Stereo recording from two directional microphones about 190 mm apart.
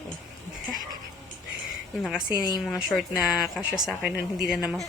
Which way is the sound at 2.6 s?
Centre (ahead or behind).